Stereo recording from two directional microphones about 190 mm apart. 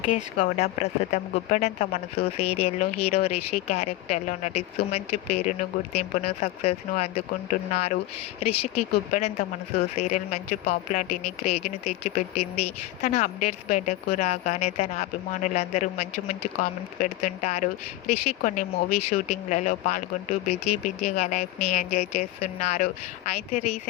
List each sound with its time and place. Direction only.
0.0 s a woman's voice: 40° left (ahead or behind)